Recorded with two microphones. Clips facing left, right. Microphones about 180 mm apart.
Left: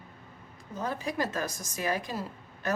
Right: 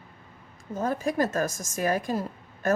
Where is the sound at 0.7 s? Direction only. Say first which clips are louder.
Right 6 dB; 45° right (ahead or behind).